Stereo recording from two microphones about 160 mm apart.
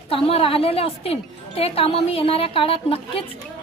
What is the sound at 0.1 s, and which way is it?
A woman's voice, 35° left (ahead or behind).